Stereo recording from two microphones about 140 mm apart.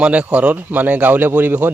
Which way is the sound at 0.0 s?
10° right (ahead or behind).